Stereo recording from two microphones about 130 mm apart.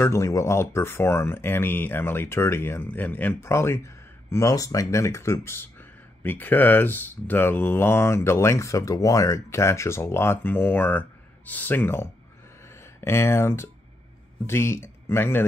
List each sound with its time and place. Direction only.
0.0 s speech: 25° left (ahead or behind)
12.6 s a sound: 20° left (ahead or behind)
14.4 s speech: 20° left (ahead or behind)